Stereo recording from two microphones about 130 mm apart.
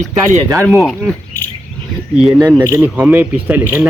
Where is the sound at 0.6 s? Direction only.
Centre (ahead or behind).